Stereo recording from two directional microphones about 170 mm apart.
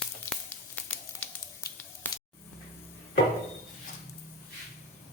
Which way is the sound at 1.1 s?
20° left (ahead or behind).